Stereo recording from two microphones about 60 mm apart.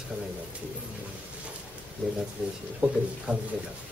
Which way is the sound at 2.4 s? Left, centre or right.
Centre.